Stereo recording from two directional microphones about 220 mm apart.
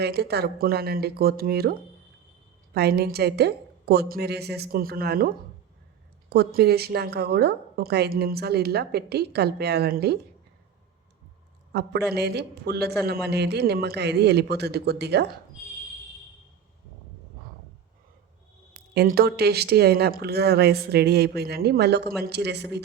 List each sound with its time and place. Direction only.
0.0 s a woman's voice: 45° right (ahead or behind)
2.7 s a woman's voice: 45° right (ahead or behind)
6.3 s a woman's voice: 45° right (ahead or behind)
11.7 s a woman's voice: 50° right (ahead or behind)
18.9 s a woman's voice: 45° right (ahead or behind)